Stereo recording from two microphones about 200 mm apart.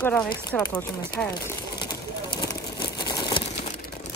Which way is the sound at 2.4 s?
20° left (ahead or behind).